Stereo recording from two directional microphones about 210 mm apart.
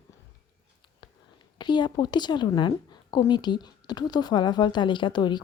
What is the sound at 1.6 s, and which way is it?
Speech, 20° left (ahead or behind).